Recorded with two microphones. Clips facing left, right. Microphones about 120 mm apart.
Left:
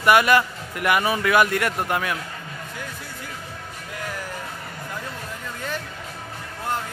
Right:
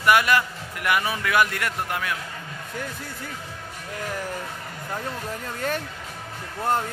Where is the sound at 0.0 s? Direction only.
50° left (ahead or behind).